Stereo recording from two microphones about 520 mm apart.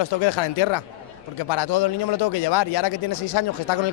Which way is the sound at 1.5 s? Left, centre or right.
Left.